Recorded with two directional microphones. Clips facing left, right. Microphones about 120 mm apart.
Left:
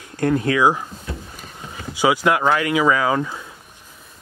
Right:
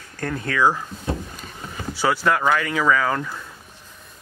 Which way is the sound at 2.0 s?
15° left (ahead or behind).